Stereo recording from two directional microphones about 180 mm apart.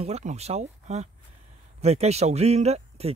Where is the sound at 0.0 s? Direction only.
40° right (ahead or behind).